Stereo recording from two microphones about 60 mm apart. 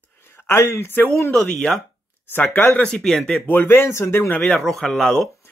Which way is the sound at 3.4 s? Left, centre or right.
Left.